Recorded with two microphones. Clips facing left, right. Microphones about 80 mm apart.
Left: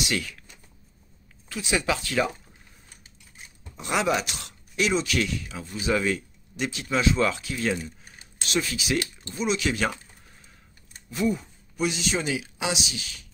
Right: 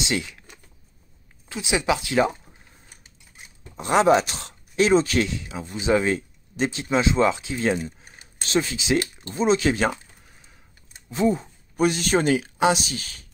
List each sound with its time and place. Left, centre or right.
0.1 s speech: right
1.5 s speech: centre
3.7 s speech: right
11.1 s speech: right
11.7 s speech: right